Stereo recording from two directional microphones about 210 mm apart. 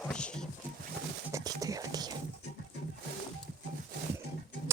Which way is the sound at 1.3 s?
15° right (ahead or behind).